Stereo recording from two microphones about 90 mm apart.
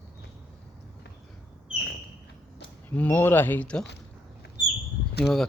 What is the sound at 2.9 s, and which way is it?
Speech, 20° left (ahead or behind).